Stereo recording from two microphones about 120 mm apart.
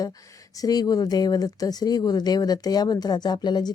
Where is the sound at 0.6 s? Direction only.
30° left (ahead or behind).